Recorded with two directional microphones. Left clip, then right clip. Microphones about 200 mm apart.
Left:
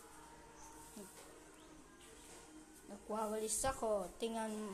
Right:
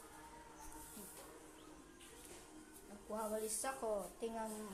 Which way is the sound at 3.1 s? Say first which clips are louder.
Left 2 dB; 45° left (ahead or behind).